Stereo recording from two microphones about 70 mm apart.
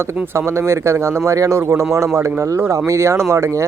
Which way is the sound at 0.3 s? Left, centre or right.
Right.